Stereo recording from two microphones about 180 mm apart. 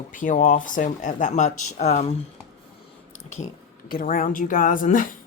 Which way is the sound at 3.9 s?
50° left (ahead or behind).